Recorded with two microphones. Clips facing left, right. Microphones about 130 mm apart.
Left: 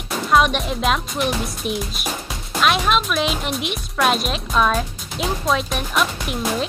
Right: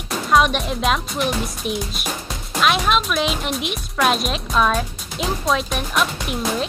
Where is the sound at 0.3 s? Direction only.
Centre (ahead or behind).